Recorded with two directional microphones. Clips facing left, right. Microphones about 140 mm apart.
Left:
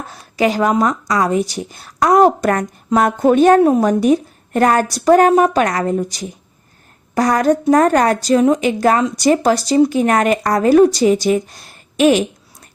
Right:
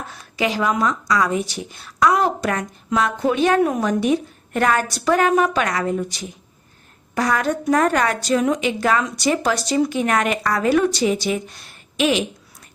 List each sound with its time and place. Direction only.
0.1 s speech: 40° left (ahead or behind)
3.6 s a woman's voice: 35° left (ahead or behind)